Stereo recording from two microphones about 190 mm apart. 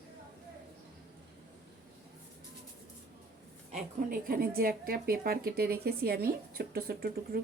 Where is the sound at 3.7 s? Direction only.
45° right (ahead or behind).